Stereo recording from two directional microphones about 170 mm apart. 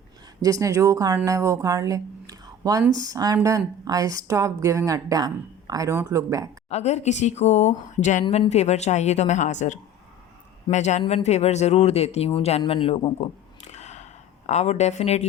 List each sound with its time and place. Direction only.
0.4 s a woman's voice: 20° right (ahead or behind)
6.7 s speech: 40° left (ahead or behind)
13.6 s a sound: 40° left (ahead or behind)